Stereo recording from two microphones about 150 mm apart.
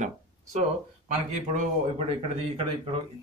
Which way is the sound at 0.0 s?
50° right (ahead or behind).